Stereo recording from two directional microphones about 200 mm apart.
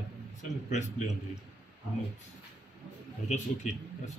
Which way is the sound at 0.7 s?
35° left (ahead or behind).